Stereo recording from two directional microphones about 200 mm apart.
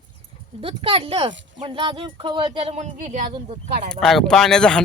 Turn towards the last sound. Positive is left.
turn(degrees=5)  # may be behind; listen again after turning